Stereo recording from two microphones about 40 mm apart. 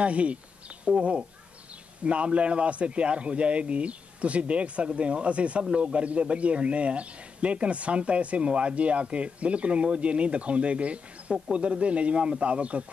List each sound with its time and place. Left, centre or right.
0.0 s a man's voice: right